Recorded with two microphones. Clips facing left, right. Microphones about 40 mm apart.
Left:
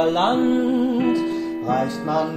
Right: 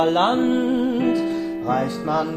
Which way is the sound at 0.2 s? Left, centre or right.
Centre.